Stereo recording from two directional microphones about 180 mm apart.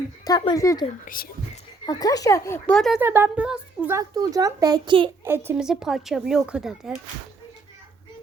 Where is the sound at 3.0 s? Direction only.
10° right (ahead or behind).